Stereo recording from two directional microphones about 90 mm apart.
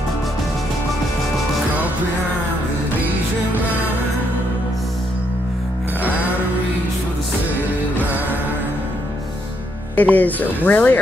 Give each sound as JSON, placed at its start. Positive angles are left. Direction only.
{"t": 9.9, "sound": "speech", "side_deg": 20}